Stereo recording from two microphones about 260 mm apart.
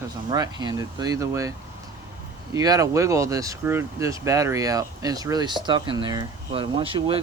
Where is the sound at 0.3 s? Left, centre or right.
Centre.